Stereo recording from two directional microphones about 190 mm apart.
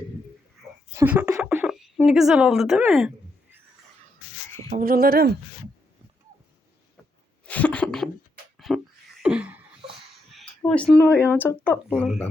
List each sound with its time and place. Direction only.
0.9 s speech: 10° right (ahead or behind)
4.7 s speech: 50° right (ahead or behind)
7.4 s a sound: 5° left (ahead or behind)
10.3 s speech: 5° left (ahead or behind)